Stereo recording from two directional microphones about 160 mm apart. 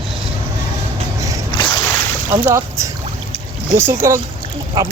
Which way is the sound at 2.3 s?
15° right (ahead or behind).